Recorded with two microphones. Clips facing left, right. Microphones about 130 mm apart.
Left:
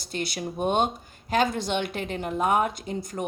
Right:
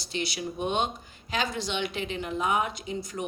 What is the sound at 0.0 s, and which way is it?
Speech, 50° left (ahead or behind).